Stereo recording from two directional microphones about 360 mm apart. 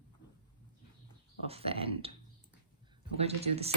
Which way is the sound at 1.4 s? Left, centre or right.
Centre.